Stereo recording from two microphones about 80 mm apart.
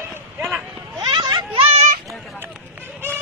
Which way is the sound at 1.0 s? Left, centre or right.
Right.